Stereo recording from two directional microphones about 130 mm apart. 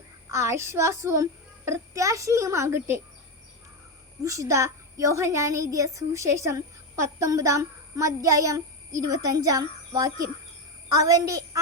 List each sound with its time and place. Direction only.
0.3 s a child's voice: 20° right (ahead or behind)
4.2 s a child's voice: 25° right (ahead or behind)